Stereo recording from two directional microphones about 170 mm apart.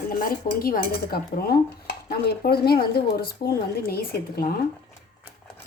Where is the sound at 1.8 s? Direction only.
65° left (ahead or behind).